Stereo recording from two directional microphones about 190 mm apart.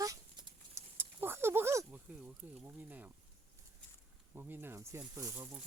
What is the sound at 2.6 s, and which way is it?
Speech, 10° right (ahead or behind).